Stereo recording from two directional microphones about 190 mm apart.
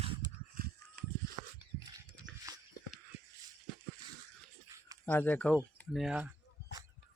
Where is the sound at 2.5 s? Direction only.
20° right (ahead or behind).